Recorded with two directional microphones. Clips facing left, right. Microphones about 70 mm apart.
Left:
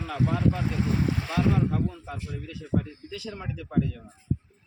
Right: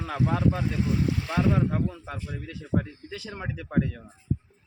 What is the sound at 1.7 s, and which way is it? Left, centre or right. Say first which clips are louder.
Speech: even; right.